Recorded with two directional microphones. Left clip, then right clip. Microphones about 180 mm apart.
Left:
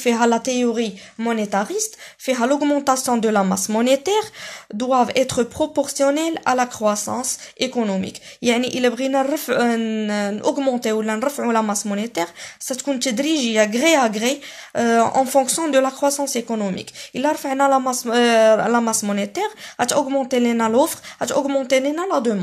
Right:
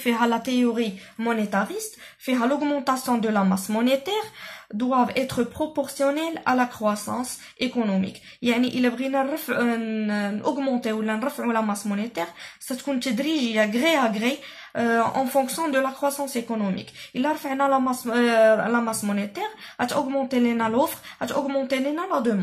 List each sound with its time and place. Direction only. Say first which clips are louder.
0.0 s speech: left 5 dB; 45° left (ahead or behind)